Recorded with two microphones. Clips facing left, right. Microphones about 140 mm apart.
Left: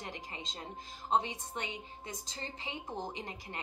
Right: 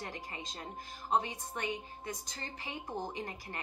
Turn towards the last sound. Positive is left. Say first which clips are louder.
# right 1 dB
turn(degrees=20)  # may be behind; listen again after turning